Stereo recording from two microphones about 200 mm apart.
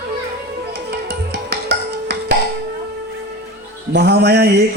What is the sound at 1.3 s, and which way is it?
Music, 55° right (ahead or behind).